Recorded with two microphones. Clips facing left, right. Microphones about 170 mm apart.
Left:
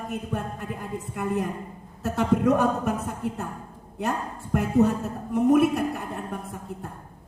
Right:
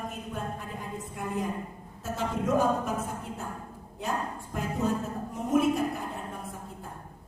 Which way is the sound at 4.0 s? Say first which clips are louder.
Left 4 dB; 65° left (ahead or behind).